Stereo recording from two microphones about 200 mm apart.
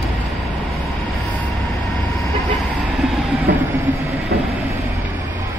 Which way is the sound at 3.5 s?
55° right (ahead or behind).